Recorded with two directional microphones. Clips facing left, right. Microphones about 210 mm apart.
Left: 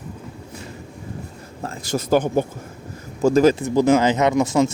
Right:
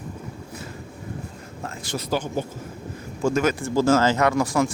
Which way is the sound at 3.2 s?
35° left (ahead or behind).